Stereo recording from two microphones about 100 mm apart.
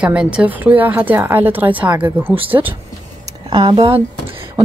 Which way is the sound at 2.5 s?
40° right (ahead or behind).